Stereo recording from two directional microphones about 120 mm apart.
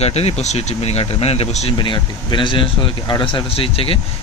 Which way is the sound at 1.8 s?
40° left (ahead or behind).